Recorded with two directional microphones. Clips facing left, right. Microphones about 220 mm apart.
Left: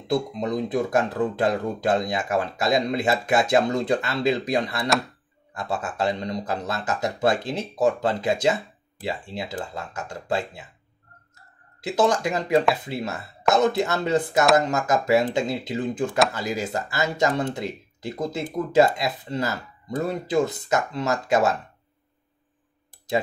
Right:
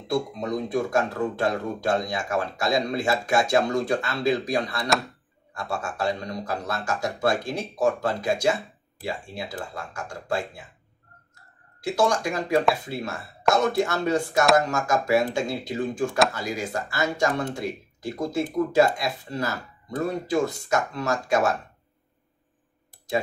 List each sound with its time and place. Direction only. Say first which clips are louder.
0.1 s speech: left 2 dB; 20° left (ahead or behind)
11.8 s speech: left 2 dB; 20° left (ahead or behind)